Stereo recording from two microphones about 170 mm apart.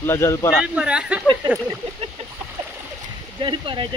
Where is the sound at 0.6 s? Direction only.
5° right (ahead or behind).